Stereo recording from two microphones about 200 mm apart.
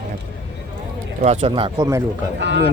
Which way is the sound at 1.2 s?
35° right (ahead or behind).